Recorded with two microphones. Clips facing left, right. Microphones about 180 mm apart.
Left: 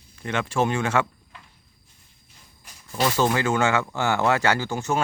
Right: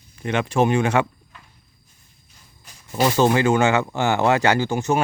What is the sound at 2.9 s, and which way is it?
Speech, 25° right (ahead or behind).